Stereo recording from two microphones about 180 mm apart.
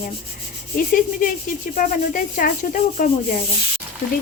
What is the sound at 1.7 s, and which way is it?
Speech, 50° left (ahead or behind).